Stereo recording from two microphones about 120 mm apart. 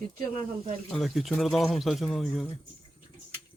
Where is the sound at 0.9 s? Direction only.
Centre (ahead or behind).